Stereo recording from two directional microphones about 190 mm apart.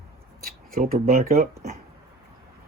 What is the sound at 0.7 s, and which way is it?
Speech, 50° right (ahead or behind).